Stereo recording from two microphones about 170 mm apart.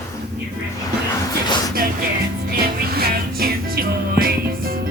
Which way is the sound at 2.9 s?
65° right (ahead or behind).